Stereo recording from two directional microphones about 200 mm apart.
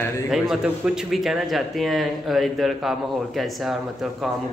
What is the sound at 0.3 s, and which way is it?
Speech, centre (ahead or behind).